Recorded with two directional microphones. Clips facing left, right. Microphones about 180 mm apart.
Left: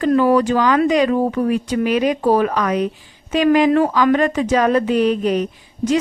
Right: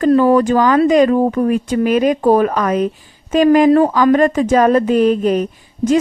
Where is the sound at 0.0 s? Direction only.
45° right (ahead or behind).